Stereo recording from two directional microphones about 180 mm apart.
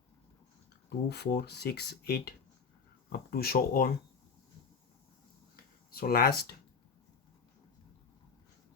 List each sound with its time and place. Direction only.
0.9 s speech: 65° left (ahead or behind)
5.9 s speech: 55° left (ahead or behind)